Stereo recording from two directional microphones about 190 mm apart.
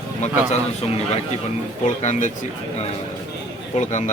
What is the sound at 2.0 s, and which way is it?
Speech, 35° left (ahead or behind).